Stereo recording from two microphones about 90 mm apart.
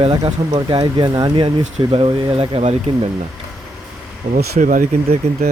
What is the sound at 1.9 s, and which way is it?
Speech, 85° right.